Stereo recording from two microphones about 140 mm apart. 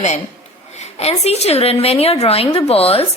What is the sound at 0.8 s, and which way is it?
A woman's voice, 50° left (ahead or behind).